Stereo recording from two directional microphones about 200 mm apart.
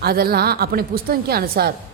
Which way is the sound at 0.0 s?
50° right (ahead or behind).